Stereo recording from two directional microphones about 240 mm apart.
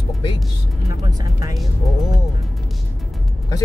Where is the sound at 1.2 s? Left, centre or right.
Centre.